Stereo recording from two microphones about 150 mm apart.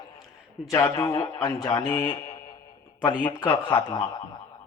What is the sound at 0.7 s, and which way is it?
A man's voice, 20° left (ahead or behind).